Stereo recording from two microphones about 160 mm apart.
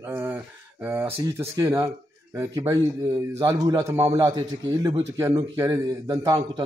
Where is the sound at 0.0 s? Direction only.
15° right (ahead or behind).